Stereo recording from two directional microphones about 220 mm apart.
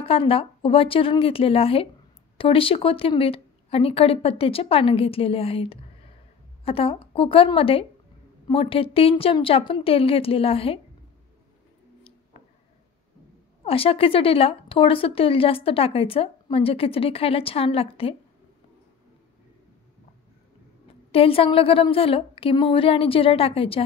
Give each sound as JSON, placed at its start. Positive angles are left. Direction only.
{"t": 0.0, "sound": "a woman's voice", "side_deg": 25}
{"t": 13.7, "sound": "a woman's voice", "side_deg": 25}
{"t": 21.1, "sound": "a woman's voice", "side_deg": 25}